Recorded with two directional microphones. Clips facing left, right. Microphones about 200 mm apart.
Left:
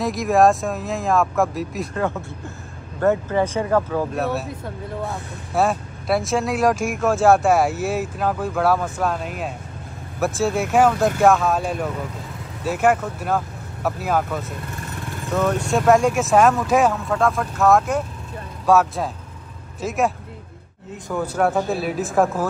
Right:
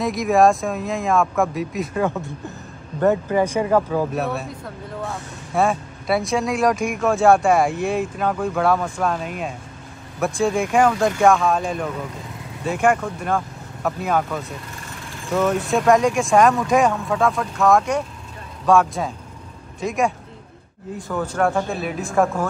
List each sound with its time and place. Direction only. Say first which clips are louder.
0.0 s speech: even; centre (ahead or behind)
3.0 s speech: right 1 dB; 15° right (ahead or behind)
4.1 s speech: left 1 dB; centre (ahead or behind)
5.5 s speech: even; centre (ahead or behind)
15.6 s speech: left 2 dB; centre (ahead or behind)
21.1 s speech: left 1 dB; 10° left (ahead or behind)